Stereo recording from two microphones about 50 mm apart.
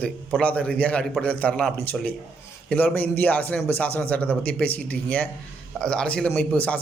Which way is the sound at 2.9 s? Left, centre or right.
Left.